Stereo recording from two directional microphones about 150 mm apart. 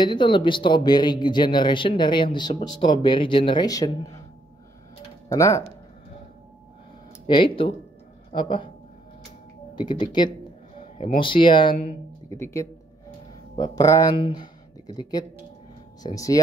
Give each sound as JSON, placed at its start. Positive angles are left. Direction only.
{"t": 0.0, "sound": "speech", "side_deg": 30}
{"t": 5.3, "sound": "speech", "side_deg": 20}
{"t": 7.2, "sound": "speech", "side_deg": 35}
{"t": 9.8, "sound": "speech", "side_deg": 30}
{"t": 12.3, "sound": "speech", "side_deg": 20}